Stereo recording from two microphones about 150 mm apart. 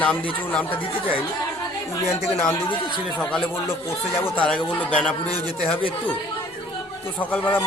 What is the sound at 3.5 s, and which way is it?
Speech, 15° left (ahead or behind).